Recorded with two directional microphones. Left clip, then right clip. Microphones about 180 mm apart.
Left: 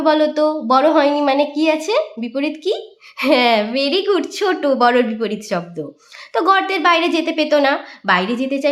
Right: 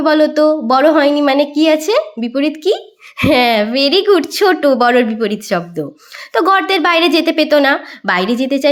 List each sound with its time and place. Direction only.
0.0 s a woman's voice: 25° right (ahead or behind)